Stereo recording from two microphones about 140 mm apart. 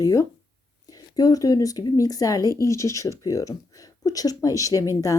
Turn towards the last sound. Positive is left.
turn(degrees=25)  # may be behind; listen again after turning